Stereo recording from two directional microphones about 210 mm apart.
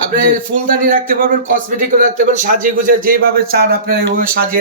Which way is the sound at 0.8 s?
40° right (ahead or behind).